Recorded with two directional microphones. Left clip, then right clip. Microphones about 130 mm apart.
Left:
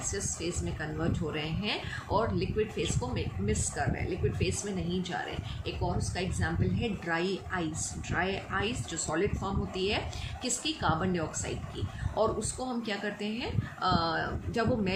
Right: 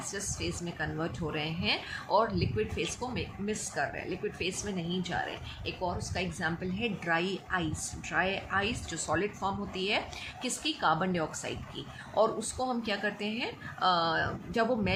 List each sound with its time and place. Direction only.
0.1 s speech: 35° right (ahead or behind)